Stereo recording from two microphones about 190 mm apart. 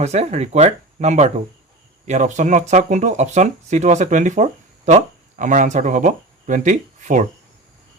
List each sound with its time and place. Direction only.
0.0 s speech: 35° right (ahead or behind)